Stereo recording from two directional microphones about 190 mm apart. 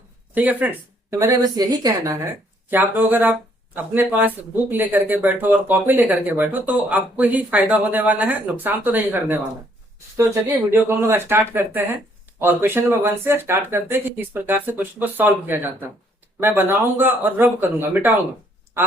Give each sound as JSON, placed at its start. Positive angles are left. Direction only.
{"t": 0.3, "sound": "speech", "side_deg": -10}
{"t": 1.2, "sound": "a woman's voice", "side_deg": -20}